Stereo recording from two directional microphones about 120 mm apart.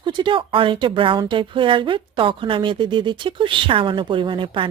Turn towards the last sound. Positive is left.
turn(degrees=-45)  # may be behind; listen again after turning